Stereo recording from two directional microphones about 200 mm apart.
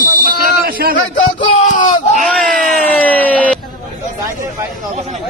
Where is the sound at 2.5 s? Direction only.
45° right (ahead or behind).